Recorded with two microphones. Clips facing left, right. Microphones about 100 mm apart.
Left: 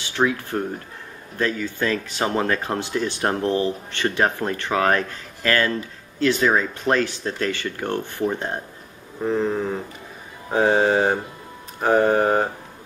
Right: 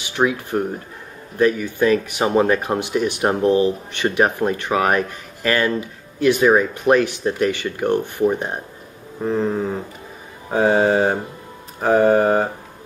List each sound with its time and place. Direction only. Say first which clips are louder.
0.0 s speech: right 2 dB; 15° right (ahead or behind)
9.2 s mantra: right 2 dB; 5° right (ahead or behind)